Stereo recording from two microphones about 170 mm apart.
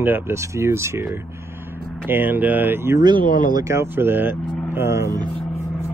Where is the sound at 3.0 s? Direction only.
25° right (ahead or behind).